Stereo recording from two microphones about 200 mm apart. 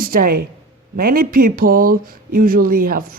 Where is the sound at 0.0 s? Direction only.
45° right (ahead or behind).